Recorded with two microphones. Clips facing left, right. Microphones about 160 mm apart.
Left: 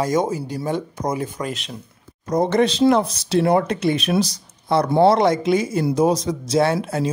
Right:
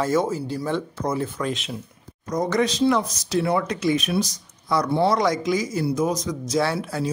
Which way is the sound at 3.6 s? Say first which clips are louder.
Left 2 dB; 60° left (ahead or behind).